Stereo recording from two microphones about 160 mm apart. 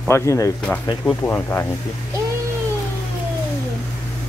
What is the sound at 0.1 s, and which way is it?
Speech, 20° left (ahead or behind).